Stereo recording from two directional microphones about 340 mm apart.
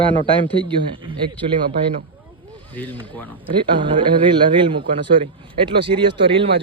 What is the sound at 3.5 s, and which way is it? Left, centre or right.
A man's voice, centre.